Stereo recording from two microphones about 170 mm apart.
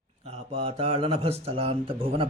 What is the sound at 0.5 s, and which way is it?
A man's voice, 35° right (ahead or behind).